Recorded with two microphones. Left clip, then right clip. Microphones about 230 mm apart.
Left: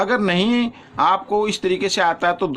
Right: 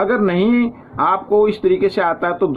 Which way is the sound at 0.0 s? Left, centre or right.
Left.